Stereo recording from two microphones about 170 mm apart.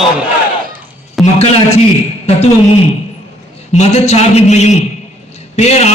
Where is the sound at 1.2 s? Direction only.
Centre (ahead or behind).